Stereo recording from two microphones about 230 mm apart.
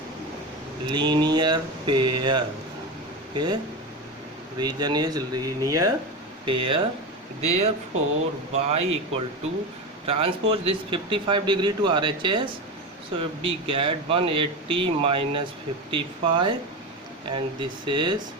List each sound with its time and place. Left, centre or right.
0.9 s speech: centre
4.6 s speech: centre